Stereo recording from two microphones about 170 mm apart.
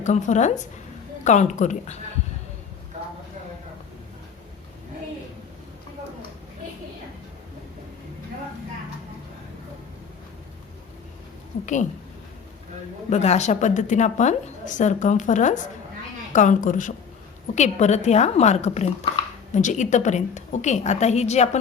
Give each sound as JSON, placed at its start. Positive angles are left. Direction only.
{"t": 0.0, "sound": "a woman's voice", "side_deg": 45}
{"t": 11.6, "sound": "a woman's voice", "side_deg": 45}
{"t": 13.1, "sound": "a woman's voice", "side_deg": 40}